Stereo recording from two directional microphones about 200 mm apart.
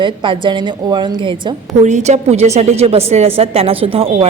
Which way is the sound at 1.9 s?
35° right (ahead or behind).